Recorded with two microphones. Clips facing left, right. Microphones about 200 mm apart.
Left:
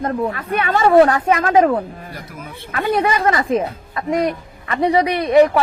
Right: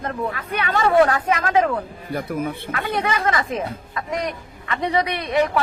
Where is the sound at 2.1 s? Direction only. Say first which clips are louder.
Right 9 dB; 55° right (ahead or behind).